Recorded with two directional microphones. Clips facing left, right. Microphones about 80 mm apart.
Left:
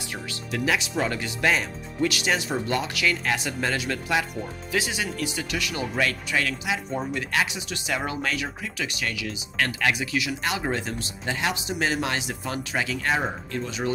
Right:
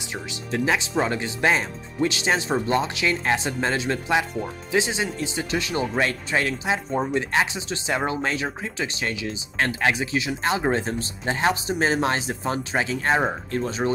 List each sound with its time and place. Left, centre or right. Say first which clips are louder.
0.0 s speech: right 1 dB; right